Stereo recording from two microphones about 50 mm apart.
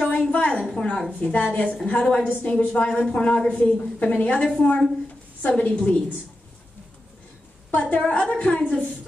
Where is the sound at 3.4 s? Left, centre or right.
Left.